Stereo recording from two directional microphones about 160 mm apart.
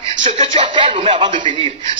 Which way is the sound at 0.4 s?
30° right (ahead or behind).